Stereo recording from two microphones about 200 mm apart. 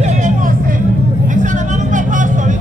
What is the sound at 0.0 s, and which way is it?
Music, 40° right (ahead or behind).